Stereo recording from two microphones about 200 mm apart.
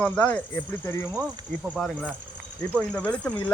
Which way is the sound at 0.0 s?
10° left (ahead or behind).